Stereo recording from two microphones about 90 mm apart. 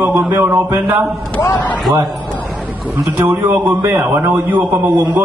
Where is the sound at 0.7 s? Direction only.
25° right (ahead or behind).